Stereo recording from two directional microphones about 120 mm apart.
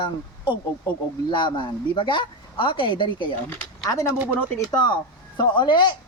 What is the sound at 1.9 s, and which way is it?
Speech, 45° left (ahead or behind).